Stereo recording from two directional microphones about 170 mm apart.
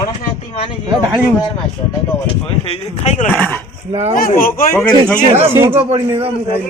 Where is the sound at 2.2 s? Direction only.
40° left (ahead or behind).